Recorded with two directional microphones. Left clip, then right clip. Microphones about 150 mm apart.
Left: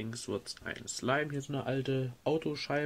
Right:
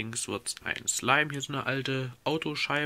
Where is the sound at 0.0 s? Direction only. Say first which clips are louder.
Right 4 dB; 15° right (ahead or behind).